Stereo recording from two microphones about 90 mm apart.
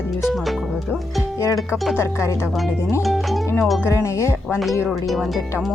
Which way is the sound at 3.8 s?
30° left (ahead or behind).